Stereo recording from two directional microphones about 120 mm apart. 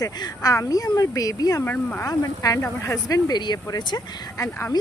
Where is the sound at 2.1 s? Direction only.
30° left (ahead or behind).